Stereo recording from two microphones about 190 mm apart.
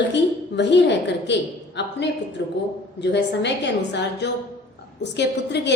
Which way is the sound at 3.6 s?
65° left (ahead or behind).